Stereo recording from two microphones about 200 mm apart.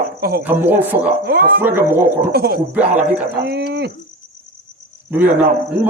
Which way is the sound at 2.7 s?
5° right (ahead or behind).